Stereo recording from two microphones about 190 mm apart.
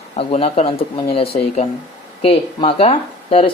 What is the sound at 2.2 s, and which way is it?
Speech, 30° left (ahead or behind).